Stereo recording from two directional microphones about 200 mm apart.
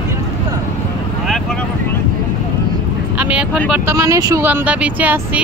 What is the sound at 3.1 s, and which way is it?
Vehicle, 10° right (ahead or behind).